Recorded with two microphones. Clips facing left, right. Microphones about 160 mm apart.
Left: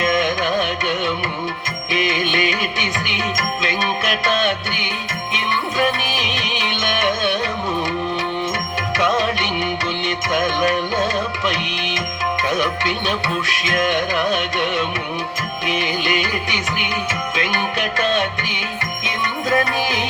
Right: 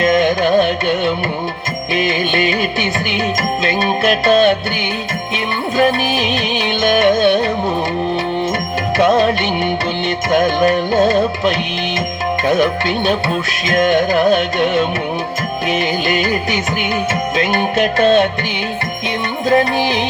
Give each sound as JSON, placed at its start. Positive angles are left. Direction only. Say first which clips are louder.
{"t": 0.0, "sound": "carnatic music", "louder": "right 6 dB", "side_deg": -35}
{"t": 1.9, "sound": "music", "louder": "right 3 dB", "side_deg": -35}
{"t": 9.0, "sound": "music", "louder": "right 7 dB", "side_deg": -35}